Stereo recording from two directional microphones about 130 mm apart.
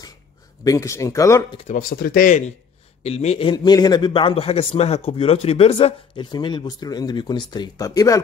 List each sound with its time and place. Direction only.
0.7 s speech: 25° left (ahead or behind)
1.7 s speech: 90° left
3.0 s a man's voice: 55° left (ahead or behind)
3.4 s speech: 30° left (ahead or behind); by 6.2 s 50° left (ahead or behind)
6.3 s speech: 35° left (ahead or behind)